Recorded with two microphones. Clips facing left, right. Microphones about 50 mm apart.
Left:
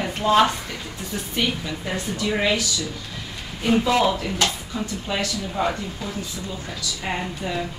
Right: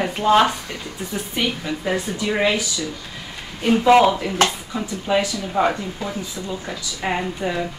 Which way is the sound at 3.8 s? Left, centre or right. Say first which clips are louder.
Right 9 dB; right.